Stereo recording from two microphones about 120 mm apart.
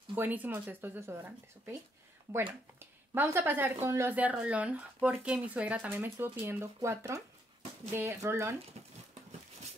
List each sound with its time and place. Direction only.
0.1 s speech: 15° right (ahead or behind)
2.8 s speech: 15° right (ahead or behind)